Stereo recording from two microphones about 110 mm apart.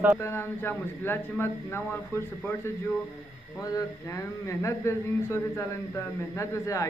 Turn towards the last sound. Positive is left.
turn(degrees=25)  # may be behind; listen again after turning